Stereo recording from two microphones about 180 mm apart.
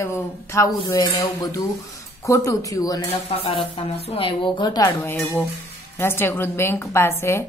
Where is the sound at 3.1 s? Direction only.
30° left (ahead or behind).